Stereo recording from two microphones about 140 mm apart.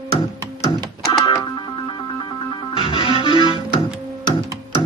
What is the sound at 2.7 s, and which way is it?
Music, 35° left (ahead or behind).